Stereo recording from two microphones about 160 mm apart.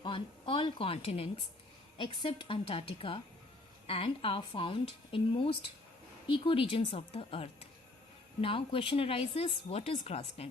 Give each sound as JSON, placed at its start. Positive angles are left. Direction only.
{"t": 0.0, "sound": "a woman's voice", "side_deg": 35}